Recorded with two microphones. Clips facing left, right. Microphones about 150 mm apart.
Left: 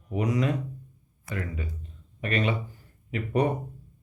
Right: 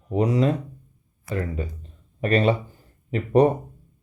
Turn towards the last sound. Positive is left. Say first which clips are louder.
# right 8 dB
turn(degrees=-35)  # may be behind; listen again after turning